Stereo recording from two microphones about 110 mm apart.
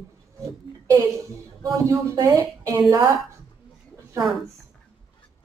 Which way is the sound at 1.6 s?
30° right (ahead or behind).